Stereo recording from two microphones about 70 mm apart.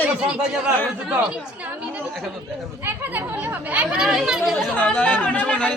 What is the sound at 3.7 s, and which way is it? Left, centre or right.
Speech, centre.